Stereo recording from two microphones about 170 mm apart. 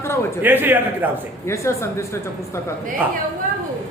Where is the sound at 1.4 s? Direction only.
15° left (ahead or behind).